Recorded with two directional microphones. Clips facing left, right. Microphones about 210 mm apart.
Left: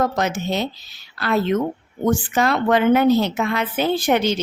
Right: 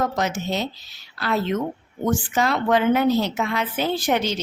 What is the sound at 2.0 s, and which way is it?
Speech, 55° left (ahead or behind).